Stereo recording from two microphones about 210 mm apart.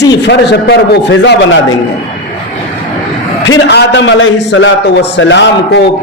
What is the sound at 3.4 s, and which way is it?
A man's voice, 55° left (ahead or behind).